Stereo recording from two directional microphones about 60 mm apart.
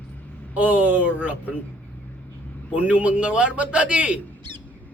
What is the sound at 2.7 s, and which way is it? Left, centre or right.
A man's voice, right.